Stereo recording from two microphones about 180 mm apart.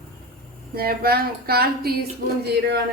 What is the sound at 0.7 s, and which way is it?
Speech, 60° right (ahead or behind).